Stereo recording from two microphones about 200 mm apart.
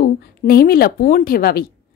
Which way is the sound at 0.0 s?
50° left (ahead or behind).